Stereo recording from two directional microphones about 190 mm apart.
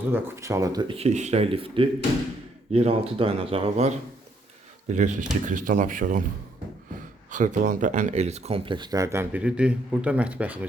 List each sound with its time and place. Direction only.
0.1 s speech: 15° right (ahead or behind); by 6.2 s 45° right (ahead or behind)
7.3 s speech: 40° right (ahead or behind); by 10.7 s 10° right (ahead or behind)